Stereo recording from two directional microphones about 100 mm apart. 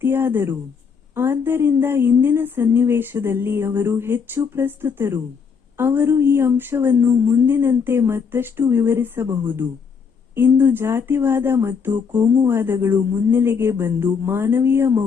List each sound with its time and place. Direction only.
0.0 s a woman's voice: 20° right (ahead or behind)